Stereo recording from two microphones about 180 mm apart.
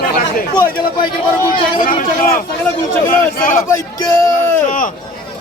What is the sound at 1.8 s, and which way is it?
Speech, 50° left (ahead or behind).